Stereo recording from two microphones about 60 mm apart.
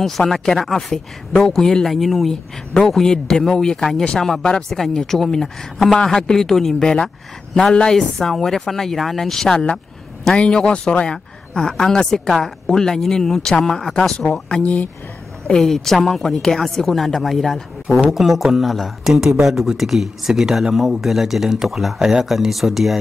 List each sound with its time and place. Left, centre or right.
0.0 s speech: centre
14.6 s speech: left
15.4 s speech: centre